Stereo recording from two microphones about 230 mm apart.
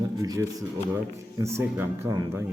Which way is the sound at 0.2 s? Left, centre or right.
Centre.